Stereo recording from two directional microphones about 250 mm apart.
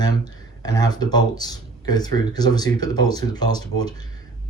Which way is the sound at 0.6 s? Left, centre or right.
Centre.